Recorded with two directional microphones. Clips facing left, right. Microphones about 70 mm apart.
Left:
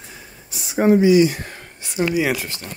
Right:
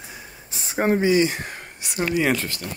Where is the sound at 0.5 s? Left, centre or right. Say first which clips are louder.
Left 5 dB; right.